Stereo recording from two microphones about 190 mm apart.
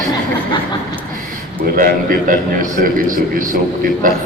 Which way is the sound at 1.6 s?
45° right (ahead or behind).